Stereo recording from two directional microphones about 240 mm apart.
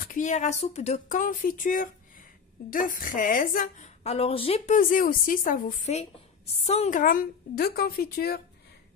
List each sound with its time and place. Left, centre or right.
0.0 s a woman's voice: left